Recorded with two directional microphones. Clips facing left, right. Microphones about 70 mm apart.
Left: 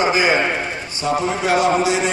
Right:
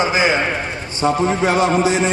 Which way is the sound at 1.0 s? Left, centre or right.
Right.